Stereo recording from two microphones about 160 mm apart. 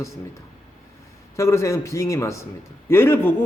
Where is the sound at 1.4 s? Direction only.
20° left (ahead or behind).